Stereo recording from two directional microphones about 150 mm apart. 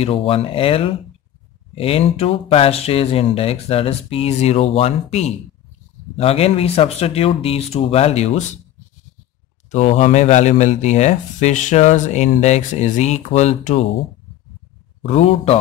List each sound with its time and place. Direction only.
0.0 s speech: 40° left (ahead or behind)
9.7 s speech: 50° left (ahead or behind)
15.0 s speech: 45° left (ahead or behind)